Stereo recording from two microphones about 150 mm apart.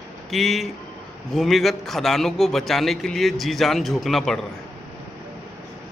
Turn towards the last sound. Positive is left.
turn(degrees=0)  # may be behind; listen again after turning